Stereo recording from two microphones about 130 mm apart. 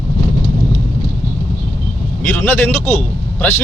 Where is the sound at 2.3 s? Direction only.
10° left (ahead or behind).